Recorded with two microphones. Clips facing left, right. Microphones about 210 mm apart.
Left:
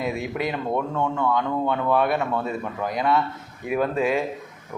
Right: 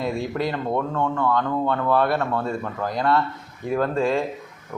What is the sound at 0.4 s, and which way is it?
Speech, 5° left (ahead or behind).